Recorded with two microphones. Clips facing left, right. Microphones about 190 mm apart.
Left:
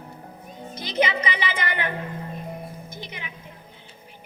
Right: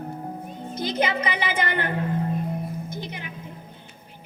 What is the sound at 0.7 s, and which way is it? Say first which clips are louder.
Music: even; 55° right (ahead or behind).